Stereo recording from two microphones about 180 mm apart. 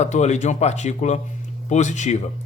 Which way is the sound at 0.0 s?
40° left (ahead or behind).